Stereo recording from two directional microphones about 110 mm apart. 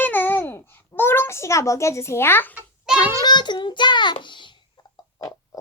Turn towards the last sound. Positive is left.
turn(degrees=30)  # may be behind; listen again after turning